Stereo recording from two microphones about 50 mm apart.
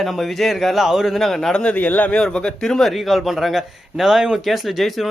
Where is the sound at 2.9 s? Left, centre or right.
Centre.